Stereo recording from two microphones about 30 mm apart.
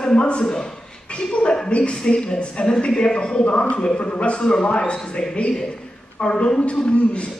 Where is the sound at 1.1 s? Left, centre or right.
Left.